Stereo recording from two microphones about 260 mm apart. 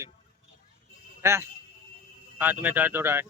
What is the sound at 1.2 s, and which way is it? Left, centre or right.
Speech, centre.